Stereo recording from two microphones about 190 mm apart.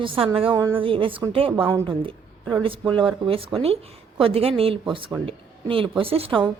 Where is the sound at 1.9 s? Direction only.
25° right (ahead or behind).